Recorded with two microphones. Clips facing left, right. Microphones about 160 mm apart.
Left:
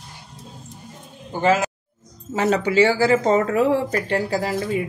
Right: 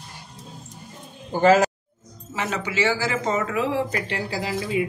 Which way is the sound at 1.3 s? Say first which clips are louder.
Right 3 dB; 40° right (ahead or behind).